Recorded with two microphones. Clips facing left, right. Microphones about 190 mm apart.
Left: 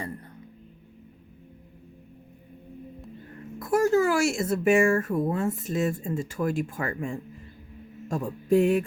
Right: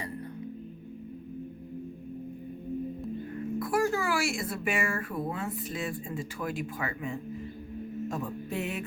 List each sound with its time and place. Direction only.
3.6 s speech: 45° left (ahead or behind)
8.0 s music: 45° left (ahead or behind)